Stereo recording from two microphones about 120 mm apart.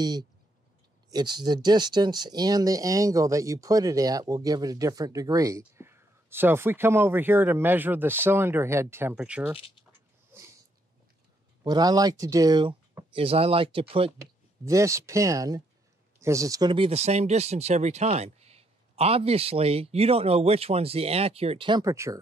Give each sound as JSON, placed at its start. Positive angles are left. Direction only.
{"t": 0.0, "sound": "speech", "side_deg": -35}
{"t": 9.1, "sound": "speech", "side_deg": -10}
{"t": 10.3, "sound": "dog", "side_deg": -20}
{"t": 11.6, "sound": "speech", "side_deg": -35}
{"t": 13.1, "sound": "speech", "side_deg": -50}
{"t": 14.6, "sound": "speech", "side_deg": -25}
{"t": 16.7, "sound": "speech", "side_deg": -50}
{"t": 17.0, "sound": "speech", "side_deg": -65}
{"t": 21.6, "sound": "speech", "side_deg": -35}
{"t": 21.9, "sound": "speech", "side_deg": -25}